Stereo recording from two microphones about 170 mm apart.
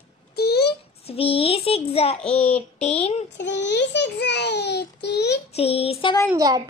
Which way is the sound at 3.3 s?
90° left.